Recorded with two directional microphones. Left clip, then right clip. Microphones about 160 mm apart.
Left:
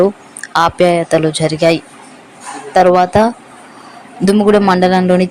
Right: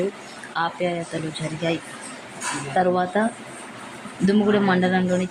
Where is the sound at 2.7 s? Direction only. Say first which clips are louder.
Left 12 dB; 40° left (ahead or behind).